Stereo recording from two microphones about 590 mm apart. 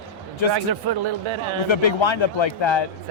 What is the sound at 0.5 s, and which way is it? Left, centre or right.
Speech, right.